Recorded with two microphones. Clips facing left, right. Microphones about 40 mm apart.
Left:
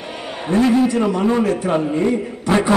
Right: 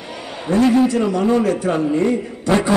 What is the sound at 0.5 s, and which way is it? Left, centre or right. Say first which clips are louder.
A man's voice: right 1 dB; left.